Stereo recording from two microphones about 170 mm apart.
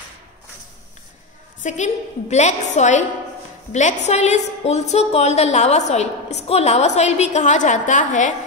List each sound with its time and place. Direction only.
1.6 s a woman's voice: 45° left (ahead or behind)